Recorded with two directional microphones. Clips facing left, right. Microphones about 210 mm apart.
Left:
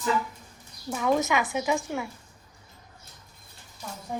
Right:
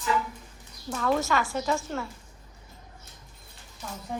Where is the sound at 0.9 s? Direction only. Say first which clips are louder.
Left 1 dB; 15° left (ahead or behind).